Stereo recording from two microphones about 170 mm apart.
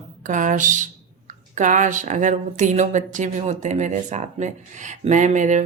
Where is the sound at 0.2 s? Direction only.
50° right (ahead or behind).